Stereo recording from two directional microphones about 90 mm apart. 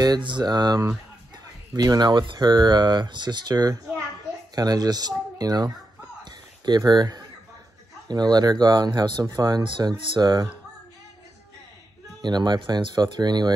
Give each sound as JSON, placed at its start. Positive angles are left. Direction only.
{"t": 0.2, "sound": "speech", "side_deg": -55}
{"t": 9.6, "sound": "speech", "side_deg": -60}
{"t": 12.2, "sound": "speech", "side_deg": -55}